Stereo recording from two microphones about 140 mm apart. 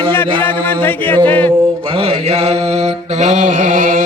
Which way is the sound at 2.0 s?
45° right (ahead or behind).